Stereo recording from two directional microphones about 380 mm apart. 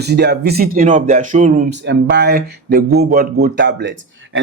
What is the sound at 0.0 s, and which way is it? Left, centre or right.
Speech, right.